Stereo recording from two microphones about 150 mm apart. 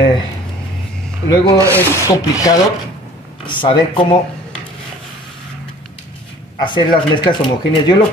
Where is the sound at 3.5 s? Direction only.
35° left (ahead or behind).